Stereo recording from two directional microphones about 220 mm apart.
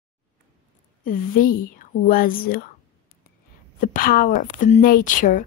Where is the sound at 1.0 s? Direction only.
40° left (ahead or behind).